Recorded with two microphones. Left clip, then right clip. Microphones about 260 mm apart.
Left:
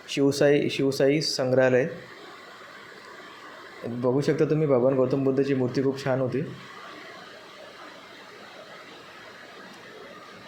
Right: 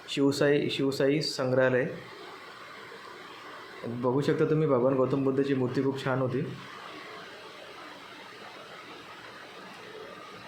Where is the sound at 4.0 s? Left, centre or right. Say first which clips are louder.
Left 3 dB; centre.